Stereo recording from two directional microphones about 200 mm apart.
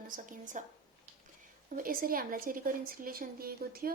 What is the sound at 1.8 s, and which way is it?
Speech, 45° right (ahead or behind).